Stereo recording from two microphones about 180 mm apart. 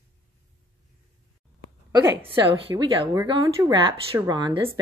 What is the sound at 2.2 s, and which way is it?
A woman's voice, 25° right (ahead or behind).